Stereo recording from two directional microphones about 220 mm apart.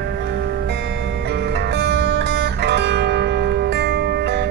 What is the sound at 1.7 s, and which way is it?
Music, 50° right (ahead or behind).